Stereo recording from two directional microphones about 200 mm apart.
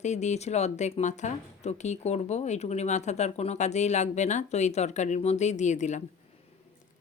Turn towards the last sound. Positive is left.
turn(degrees=35)  # may be behind; listen again after turning